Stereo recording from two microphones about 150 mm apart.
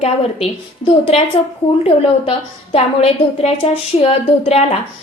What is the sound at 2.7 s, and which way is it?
A woman's voice, 40° left (ahead or behind).